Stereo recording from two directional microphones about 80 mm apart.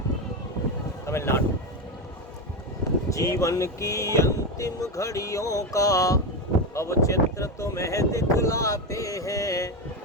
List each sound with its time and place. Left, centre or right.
1.0 s speech: left
3.1 s speech: left